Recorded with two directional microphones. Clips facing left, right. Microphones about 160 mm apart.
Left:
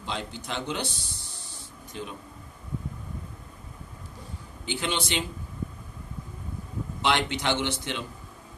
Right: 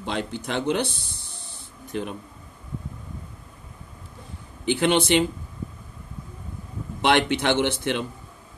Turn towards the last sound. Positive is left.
turn(degrees=-55)  # may be behind; listen again after turning